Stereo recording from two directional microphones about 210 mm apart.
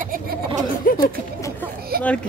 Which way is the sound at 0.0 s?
40° right (ahead or behind).